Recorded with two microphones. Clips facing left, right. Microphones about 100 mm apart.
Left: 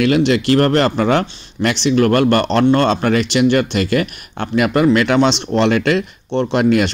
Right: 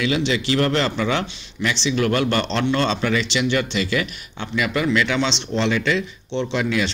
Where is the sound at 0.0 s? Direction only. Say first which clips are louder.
Left 7 dB; 55° left (ahead or behind).